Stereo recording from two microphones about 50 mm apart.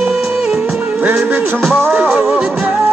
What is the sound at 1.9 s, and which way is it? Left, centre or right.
Music, centre.